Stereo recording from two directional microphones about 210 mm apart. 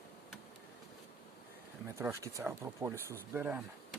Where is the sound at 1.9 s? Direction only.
15° right (ahead or behind).